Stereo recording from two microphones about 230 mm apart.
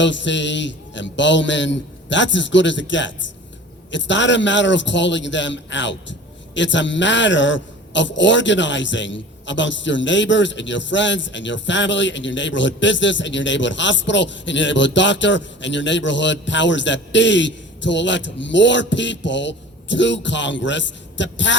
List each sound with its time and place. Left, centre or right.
0.0 s a man's voice: left